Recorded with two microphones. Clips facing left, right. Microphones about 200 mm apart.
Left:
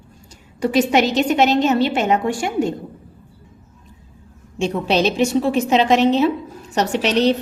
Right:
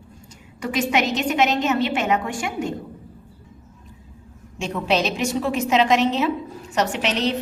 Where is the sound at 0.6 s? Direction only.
35° left (ahead or behind).